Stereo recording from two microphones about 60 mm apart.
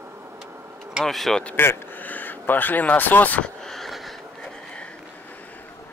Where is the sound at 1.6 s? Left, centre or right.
Left.